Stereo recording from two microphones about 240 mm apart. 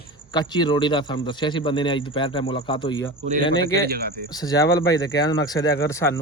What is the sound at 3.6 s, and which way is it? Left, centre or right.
Speech, right.